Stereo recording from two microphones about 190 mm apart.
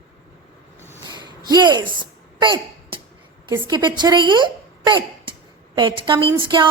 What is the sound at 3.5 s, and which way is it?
Speech, 20° right (ahead or behind).